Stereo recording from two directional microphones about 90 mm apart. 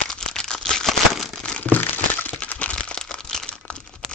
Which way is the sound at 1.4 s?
15° left (ahead or behind).